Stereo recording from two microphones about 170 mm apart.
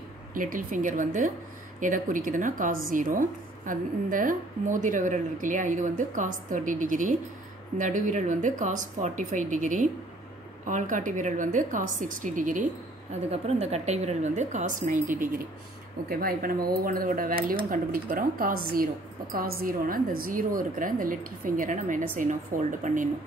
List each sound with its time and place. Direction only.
0.3 s speech: 55° right (ahead or behind)
13.3 s speech: 40° right (ahead or behind)